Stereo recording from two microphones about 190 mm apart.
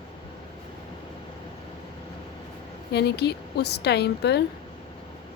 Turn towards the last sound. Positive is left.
turn(degrees=60)  # may be behind; listen again after turning